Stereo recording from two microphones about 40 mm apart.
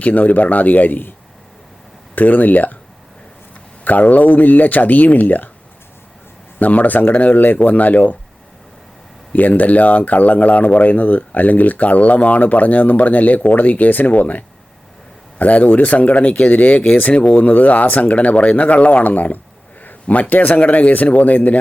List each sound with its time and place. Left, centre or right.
0.0 s speech: left
2.1 s speech: left
3.8 s speech: left
6.6 s speech: left
9.3 s speech: left